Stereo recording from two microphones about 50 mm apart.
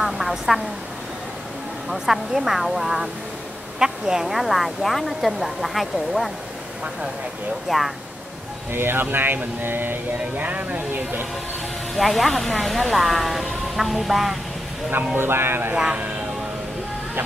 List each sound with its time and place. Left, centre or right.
0.0 s speech: centre
1.9 s speech: centre
7.6 s speech: centre
8.7 s speech: right
11.9 s speech: centre
15.1 s speech: right